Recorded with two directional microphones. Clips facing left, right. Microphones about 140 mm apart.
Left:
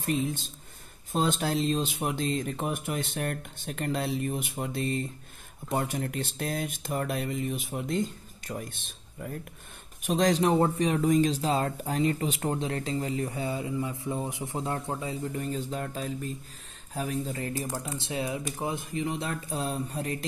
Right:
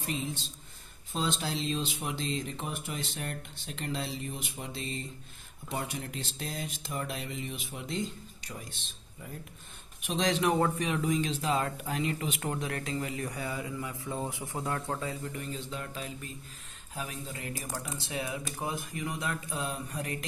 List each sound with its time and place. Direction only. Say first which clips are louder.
0.0 s a man's voice: left 6 dB; 50° left (ahead or behind); by 15.1 s 15° left (ahead or behind)
15.3 s a man's voice: left 6 dB; 40° left (ahead or behind)
17.8 s speech: left 4 dB; 25° left (ahead or behind)